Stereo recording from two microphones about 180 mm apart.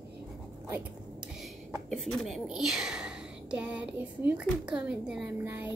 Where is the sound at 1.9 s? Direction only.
Centre (ahead or behind).